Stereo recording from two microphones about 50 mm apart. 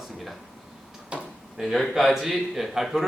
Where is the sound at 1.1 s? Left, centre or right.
Right.